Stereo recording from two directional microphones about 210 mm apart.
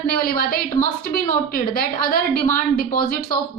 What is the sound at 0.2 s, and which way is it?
A woman's voice, 45° left (ahead or behind).